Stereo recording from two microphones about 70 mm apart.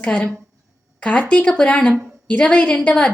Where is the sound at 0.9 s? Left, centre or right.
Centre.